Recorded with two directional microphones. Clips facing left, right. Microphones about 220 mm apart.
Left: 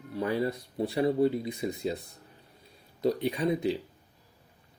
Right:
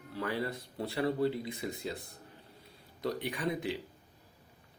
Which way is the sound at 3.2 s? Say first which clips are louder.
Left 7 dB; 25° left (ahead or behind).